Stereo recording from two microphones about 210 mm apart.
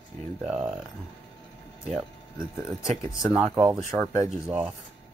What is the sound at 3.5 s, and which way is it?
Speech, 15° right (ahead or behind).